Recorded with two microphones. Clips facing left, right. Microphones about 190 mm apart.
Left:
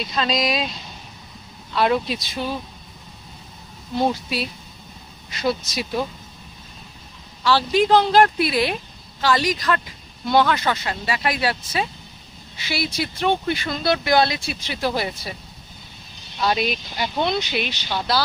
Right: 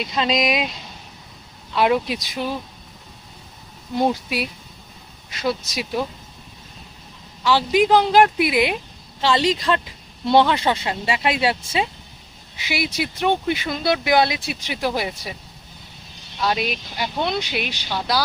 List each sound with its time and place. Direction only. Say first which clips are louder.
0.0 s speech: right 2 dB; 20° right (ahead or behind)
1.7 s speech: right 1 dB; 15° right (ahead or behind)
3.9 s speech: right 1 dB; 15° right (ahead or behind)
7.4 s speech: right 1 dB; 15° right (ahead or behind)
16.5 s speech: left 1 dB; 5° right (ahead or behind)